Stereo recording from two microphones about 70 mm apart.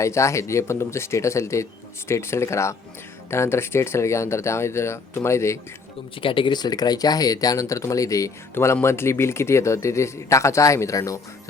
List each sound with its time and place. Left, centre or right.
0.0 s speech: left
6.5 s speech: left
8.5 s speech: left